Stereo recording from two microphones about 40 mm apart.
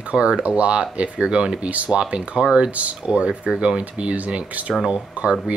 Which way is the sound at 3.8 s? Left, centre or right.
Right.